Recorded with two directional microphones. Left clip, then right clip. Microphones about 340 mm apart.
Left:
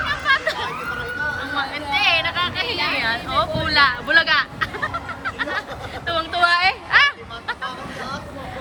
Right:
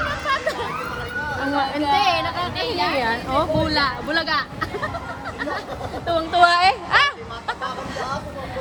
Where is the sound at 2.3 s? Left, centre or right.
Centre.